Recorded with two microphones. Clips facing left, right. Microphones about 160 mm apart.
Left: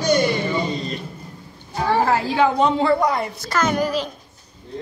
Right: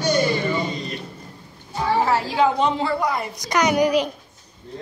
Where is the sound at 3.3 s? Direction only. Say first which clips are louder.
Right 2 dB; 15° right (ahead or behind).